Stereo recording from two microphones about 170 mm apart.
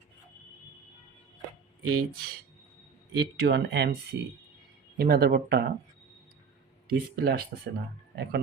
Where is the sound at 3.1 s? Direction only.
85° right.